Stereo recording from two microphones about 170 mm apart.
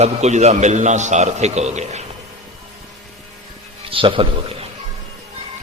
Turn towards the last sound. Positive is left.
turn(degrees=-30)  # may be behind; listen again after turning